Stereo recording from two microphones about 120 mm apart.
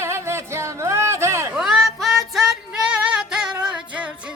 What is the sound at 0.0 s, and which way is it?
Music, 20° right (ahead or behind).